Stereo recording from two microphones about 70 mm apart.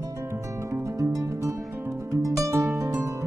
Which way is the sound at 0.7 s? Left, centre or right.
Right.